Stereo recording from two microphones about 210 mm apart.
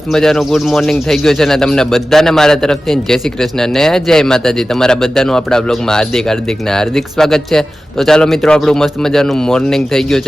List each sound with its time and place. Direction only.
0.1 s speech: centre (ahead or behind)